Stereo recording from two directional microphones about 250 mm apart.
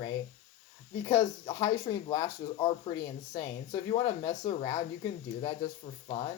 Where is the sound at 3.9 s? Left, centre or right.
Centre.